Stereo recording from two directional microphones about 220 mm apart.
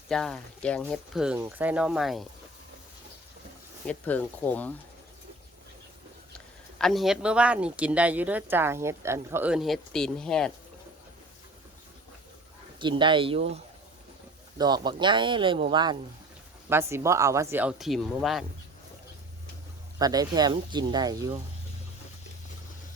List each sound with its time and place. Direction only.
0.1 s speech: centre (ahead or behind)
3.8 s speech: 5° left (ahead or behind)
6.7 s speech: centre (ahead or behind)
12.8 s speech: 20° right (ahead or behind)
14.6 s speech: 20° right (ahead or behind); by 18.4 s centre (ahead or behind)
20.0 s speech: 15° right (ahead or behind)